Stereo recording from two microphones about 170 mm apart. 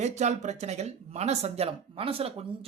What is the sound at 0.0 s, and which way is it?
Speech, 40° right (ahead or behind).